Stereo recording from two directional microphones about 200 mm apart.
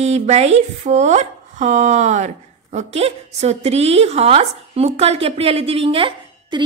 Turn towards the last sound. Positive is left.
turn(degrees=-25)  # may be behind; listen again after turning